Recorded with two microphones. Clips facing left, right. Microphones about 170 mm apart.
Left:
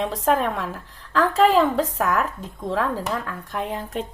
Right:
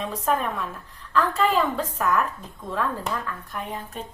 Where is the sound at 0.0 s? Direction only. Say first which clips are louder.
Left 4 dB; 90° left.